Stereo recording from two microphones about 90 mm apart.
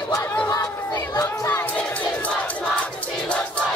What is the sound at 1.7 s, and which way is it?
Crowd, 15° left (ahead or behind).